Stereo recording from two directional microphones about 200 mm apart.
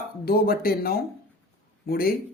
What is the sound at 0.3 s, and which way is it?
Speech, 50° left (ahead or behind).